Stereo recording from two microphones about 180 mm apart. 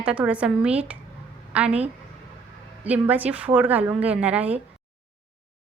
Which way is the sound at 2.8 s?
10° right (ahead or behind).